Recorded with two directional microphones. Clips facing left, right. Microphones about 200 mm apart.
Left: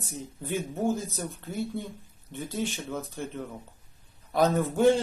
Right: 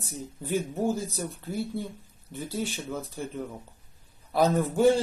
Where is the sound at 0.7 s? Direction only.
Centre (ahead or behind).